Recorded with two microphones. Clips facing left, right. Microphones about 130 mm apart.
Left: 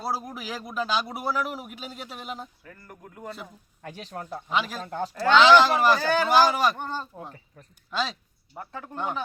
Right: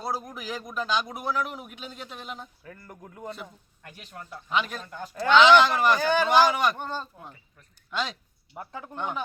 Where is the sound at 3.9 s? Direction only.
90° left.